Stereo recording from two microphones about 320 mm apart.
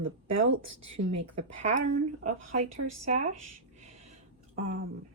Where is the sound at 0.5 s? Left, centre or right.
Right.